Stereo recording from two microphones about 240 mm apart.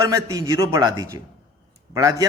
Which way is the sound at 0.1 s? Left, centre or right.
Centre.